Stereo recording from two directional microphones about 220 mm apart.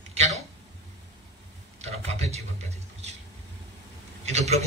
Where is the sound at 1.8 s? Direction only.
30° right (ahead or behind).